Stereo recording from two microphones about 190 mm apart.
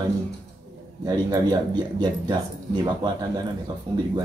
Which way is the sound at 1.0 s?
20° right (ahead or behind).